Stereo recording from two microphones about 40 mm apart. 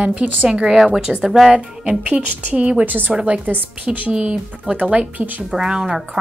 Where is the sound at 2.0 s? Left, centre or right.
Right.